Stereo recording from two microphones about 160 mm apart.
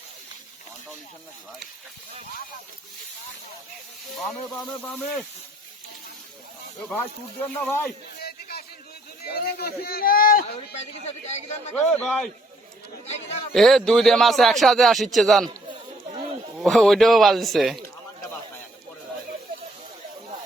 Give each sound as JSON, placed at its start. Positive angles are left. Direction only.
{"t": 4.6, "sound": "a man's voice", "side_deg": 5}
{"t": 7.6, "sound": "a man's voice", "side_deg": 15}
{"t": 8.2, "sound": "a sound", "side_deg": 75}
{"t": 9.3, "sound": "a man's voice", "side_deg": 75}
{"t": 10.8, "sound": "speech", "side_deg": 45}
{"t": 11.8, "sound": "a man's voice", "side_deg": 5}
{"t": 13.1, "sound": "a man's voice", "side_deg": 40}
{"t": 13.5, "sound": "a man's voice", "side_deg": 0}
{"t": 16.6, "sound": "a man's voice", "side_deg": 0}